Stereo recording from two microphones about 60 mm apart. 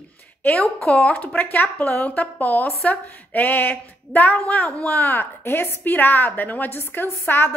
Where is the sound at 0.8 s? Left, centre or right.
Left.